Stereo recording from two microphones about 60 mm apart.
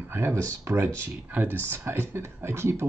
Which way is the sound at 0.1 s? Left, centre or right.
Right.